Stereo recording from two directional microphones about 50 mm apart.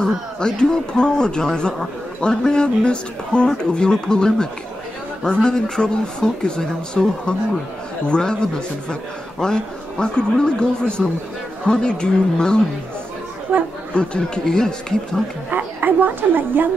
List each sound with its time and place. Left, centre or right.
0.4 s speech: centre
13.9 s speech: centre
15.5 s a woman's voice: right